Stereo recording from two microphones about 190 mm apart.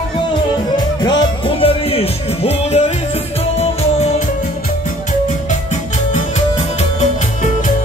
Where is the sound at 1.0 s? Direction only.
25° left (ahead or behind).